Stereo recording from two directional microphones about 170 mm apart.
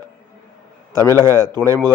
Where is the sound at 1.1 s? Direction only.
20° right (ahead or behind).